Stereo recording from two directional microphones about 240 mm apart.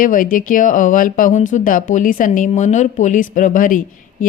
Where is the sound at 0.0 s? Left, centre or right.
Left.